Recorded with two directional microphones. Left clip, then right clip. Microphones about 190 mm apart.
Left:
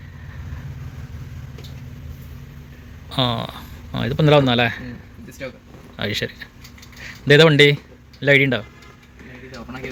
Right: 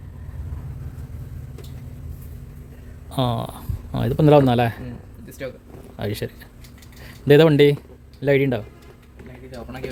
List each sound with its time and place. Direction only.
3.1 s a man's voice: 20° right (ahead or behind)
6.0 s speech: 15° right (ahead or behind)